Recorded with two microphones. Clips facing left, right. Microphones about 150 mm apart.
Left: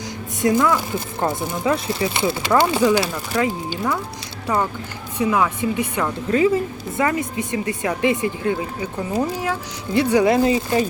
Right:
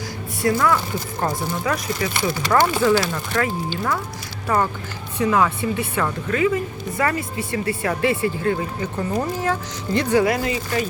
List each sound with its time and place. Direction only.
0.4 s speech: 20° left (ahead or behind)
6.2 s speech: 30° left (ahead or behind)
7.0 s speech: 20° left (ahead or behind)
10.2 s speech: 25° left (ahead or behind)